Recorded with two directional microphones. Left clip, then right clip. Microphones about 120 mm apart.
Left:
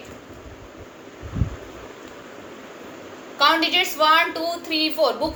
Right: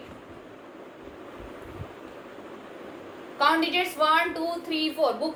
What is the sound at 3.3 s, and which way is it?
A woman's voice, 45° left (ahead or behind).